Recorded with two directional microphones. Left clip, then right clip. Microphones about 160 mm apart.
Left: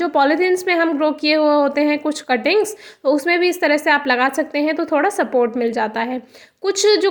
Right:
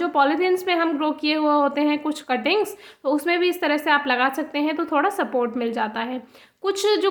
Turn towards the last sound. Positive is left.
turn(degrees=20)  # may be behind; listen again after turning